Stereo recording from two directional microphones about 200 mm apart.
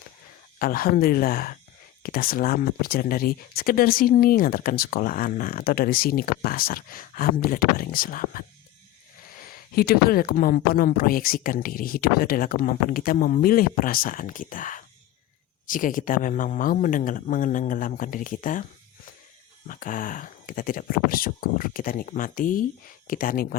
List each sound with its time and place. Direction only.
0.6 s speech: 45° left (ahead or behind)
9.7 s speech: 50° left (ahead or behind)
19.6 s speech: 40° left (ahead or behind)